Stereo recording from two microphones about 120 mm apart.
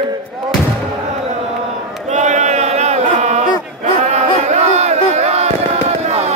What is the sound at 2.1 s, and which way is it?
Chant, 80° right.